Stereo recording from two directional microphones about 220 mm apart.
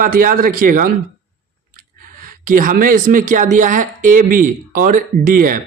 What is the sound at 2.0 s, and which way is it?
Speech, 40° right (ahead or behind).